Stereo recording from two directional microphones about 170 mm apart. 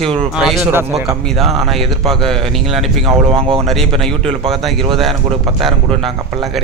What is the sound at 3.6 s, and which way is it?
Speech, centre (ahead or behind).